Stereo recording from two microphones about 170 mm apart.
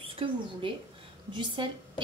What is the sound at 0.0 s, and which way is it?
A woman's voice, 30° right (ahead or behind).